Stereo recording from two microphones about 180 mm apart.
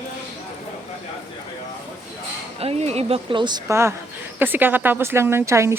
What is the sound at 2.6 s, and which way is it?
Speech, 35° right (ahead or behind).